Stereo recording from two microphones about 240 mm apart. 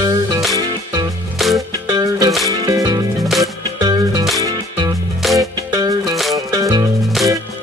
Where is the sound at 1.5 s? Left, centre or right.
Centre.